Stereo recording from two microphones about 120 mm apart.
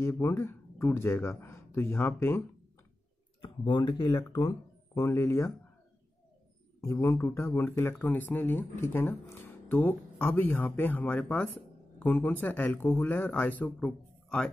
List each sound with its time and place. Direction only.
0.0 s speech: 25° left (ahead or behind)
3.4 s speech: 40° left (ahead or behind)
4.9 s speech: 20° left (ahead or behind)
6.8 s a man's voice: 25° left (ahead or behind); by 14.5 s 5° left (ahead or behind)